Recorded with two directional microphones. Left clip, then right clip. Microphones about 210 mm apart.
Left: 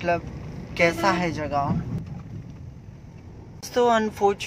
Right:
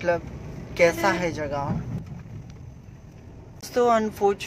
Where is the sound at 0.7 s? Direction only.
Centre (ahead or behind).